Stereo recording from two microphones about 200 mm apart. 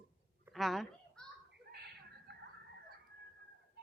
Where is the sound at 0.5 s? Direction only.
Centre (ahead or behind).